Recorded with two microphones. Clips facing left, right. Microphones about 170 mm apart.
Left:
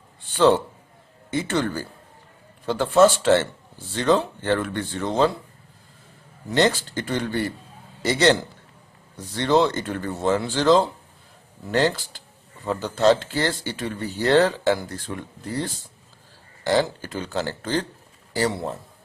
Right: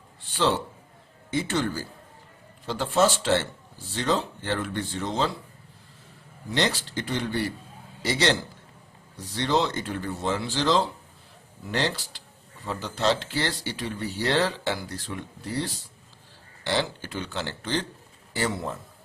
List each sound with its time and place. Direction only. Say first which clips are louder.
0.3 s speech: left 7 dB; 55° left (ahead or behind)
6.5 s speech: left 6 dB; 50° left (ahead or behind); by 18.8 s 35° left (ahead or behind)